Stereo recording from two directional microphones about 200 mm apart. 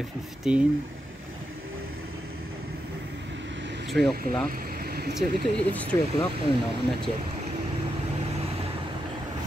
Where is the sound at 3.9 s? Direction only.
Centre (ahead or behind).